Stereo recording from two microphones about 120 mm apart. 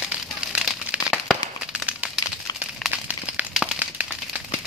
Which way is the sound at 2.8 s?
10° right (ahead or behind).